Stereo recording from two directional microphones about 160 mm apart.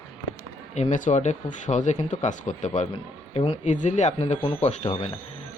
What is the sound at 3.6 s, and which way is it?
Speech, 50° left (ahead or behind).